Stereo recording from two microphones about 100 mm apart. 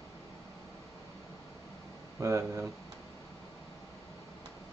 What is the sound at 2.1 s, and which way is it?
Speech, 30° right (ahead or behind).